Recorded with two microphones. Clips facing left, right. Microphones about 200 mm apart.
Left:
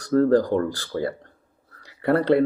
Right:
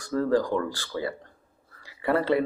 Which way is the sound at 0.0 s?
50° left (ahead or behind).